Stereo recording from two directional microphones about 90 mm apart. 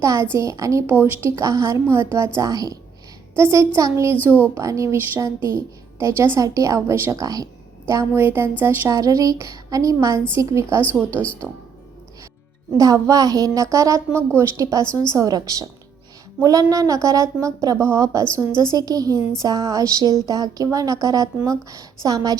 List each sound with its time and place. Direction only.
0.0 s a woman's voice: 35° right (ahead or behind)
0.9 s speech: 20° right (ahead or behind)
1.4 s a woman's voice: 35° right (ahead or behind)
4.2 s speech: 20° right (ahead or behind)
4.5 s a woman's voice: 35° right (ahead or behind)
8.1 s speech: 25° right (ahead or behind)
8.9 s a woman's voice: 40° right (ahead or behind)
12.7 s a woman's voice: 40° right (ahead or behind)